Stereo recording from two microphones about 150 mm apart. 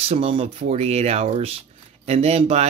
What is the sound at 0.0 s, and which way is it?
Speech, 40° right (ahead or behind).